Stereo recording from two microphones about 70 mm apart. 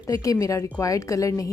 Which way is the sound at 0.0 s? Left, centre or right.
Left.